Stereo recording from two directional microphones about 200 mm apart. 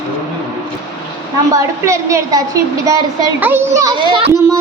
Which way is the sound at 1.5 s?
15° right (ahead or behind).